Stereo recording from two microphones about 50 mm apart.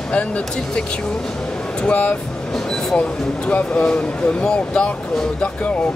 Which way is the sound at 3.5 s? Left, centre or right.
Left.